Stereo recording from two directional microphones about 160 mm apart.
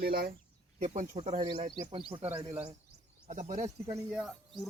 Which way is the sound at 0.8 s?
45° right (ahead or behind).